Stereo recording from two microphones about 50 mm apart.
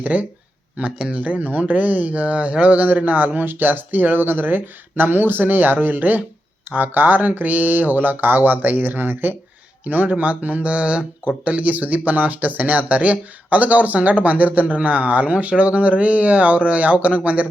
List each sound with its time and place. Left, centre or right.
0.0 s speech: right
0.8 s speech: centre
1.2 s speech: right